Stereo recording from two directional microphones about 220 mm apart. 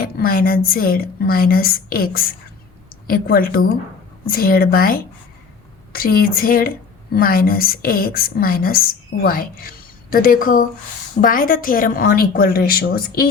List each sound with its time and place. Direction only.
0.0 s a woman's voice: 40° left (ahead or behind)